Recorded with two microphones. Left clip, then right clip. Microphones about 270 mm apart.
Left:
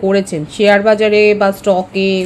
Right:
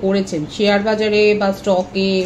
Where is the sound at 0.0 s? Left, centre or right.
Left.